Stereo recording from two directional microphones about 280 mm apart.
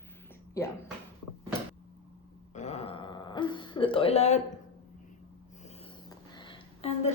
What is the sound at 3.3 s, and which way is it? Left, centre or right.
Speech, centre.